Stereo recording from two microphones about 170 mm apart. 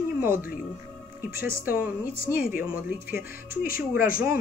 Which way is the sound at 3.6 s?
55° left (ahead or behind).